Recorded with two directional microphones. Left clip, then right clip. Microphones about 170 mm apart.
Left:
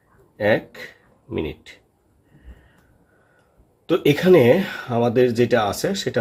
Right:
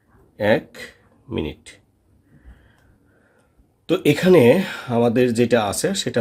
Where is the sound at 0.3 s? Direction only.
35° right (ahead or behind).